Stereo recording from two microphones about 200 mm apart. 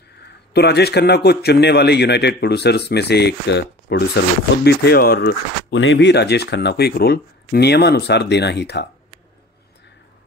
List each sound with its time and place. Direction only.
0.5 s speech: 55° left (ahead or behind)